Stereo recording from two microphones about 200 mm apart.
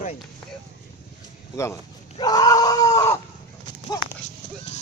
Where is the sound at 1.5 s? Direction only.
15° left (ahead or behind).